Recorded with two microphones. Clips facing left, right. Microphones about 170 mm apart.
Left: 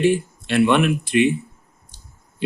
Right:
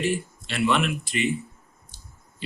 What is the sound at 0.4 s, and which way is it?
Speech, 55° left (ahead or behind).